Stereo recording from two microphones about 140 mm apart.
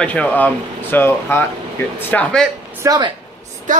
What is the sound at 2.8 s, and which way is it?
Speech, 25° right (ahead or behind).